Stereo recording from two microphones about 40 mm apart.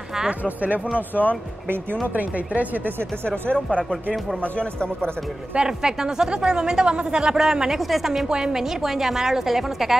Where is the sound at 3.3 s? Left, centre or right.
Left.